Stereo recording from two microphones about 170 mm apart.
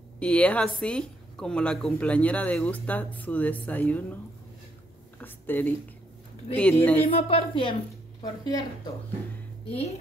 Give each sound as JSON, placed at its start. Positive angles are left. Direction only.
{"t": 0.2, "sound": "a woman's voice", "side_deg": 5}
{"t": 5.2, "sound": "a woman's voice", "side_deg": 10}
{"t": 7.0, "sound": "speech", "side_deg": 35}